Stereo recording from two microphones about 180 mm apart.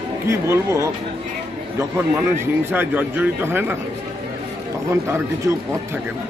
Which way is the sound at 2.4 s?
10° right (ahead or behind).